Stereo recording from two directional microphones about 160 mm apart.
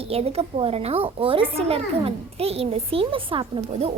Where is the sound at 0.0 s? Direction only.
40° right (ahead or behind).